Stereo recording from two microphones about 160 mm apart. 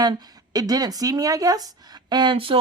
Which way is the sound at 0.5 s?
25° right (ahead or behind).